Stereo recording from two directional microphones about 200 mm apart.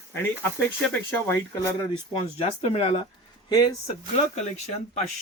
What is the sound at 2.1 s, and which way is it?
Speech, 30° left (ahead or behind).